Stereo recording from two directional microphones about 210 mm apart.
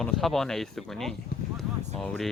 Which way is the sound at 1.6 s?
5° left (ahead or behind).